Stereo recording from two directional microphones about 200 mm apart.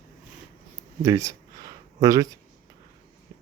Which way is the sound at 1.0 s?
15° right (ahead or behind).